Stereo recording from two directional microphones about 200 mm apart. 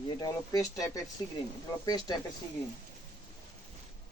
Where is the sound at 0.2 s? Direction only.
15° left (ahead or behind).